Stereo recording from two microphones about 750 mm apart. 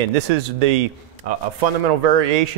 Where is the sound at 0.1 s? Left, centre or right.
Right.